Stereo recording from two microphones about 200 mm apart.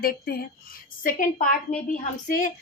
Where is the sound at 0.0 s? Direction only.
50° left (ahead or behind).